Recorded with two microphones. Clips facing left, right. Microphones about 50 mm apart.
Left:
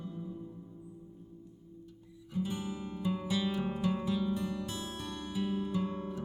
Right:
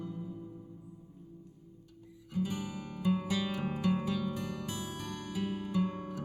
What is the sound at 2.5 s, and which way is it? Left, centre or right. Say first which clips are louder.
Music: left 1 dB; left.